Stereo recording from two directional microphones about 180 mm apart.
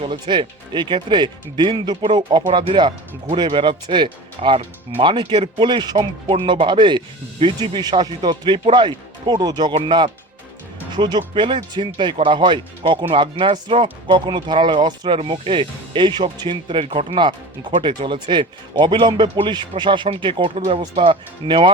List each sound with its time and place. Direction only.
0.0 s speech: 25° right (ahead or behind)